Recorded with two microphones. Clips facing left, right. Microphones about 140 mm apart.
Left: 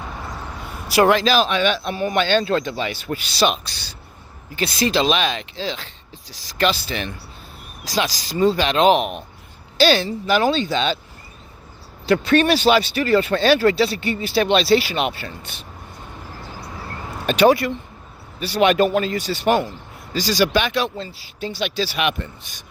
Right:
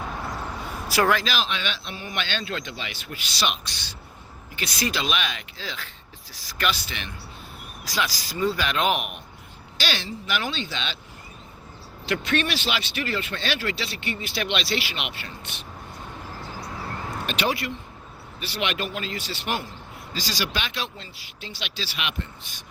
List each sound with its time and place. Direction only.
1.0 s speech: 25° left (ahead or behind)
1.3 s speech: 45° left (ahead or behind)
8.4 s speech: 25° left (ahead or behind); by 10.9 s 40° left (ahead or behind)
12.0 s speech: 35° left (ahead or behind)
17.2 s speech: 40° left (ahead or behind)
21.0 s speech: 35° left (ahead or behind)
21.6 s speech: 45° left (ahead or behind)